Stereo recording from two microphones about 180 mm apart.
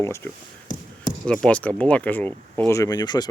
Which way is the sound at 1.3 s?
5° left (ahead or behind).